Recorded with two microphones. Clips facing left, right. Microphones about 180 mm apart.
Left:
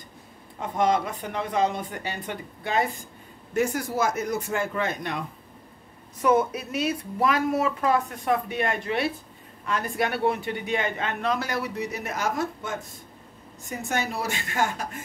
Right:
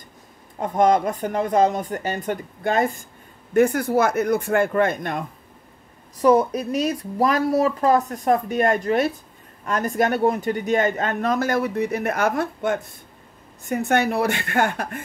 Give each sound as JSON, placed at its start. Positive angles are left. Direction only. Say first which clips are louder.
{"t": 0.6, "sound": "speech", "louder": "right 6 dB", "side_deg": -45}
{"t": 6.1, "sound": "speech", "louder": "right 5 dB", "side_deg": -35}